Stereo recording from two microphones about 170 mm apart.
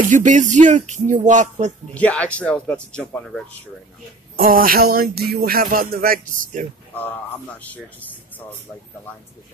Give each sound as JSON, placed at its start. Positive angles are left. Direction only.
{"t": 0.0, "sound": "music", "side_deg": -50}
{"t": 2.0, "sound": "speech", "side_deg": 10}
{"t": 4.4, "sound": "music", "side_deg": -55}
{"t": 7.5, "sound": "speech", "side_deg": 10}